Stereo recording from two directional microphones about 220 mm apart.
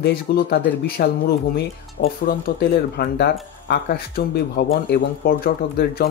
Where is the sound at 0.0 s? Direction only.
45° left (ahead or behind).